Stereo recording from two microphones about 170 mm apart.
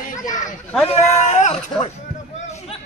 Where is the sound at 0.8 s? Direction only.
40° left (ahead or behind).